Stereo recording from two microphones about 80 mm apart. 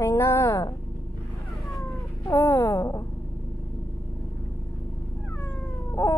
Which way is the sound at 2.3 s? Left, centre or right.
Left.